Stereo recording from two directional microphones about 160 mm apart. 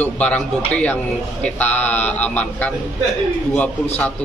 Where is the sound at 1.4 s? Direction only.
10° left (ahead or behind).